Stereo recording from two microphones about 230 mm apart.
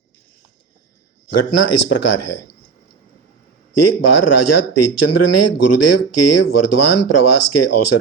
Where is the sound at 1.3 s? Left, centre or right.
Left.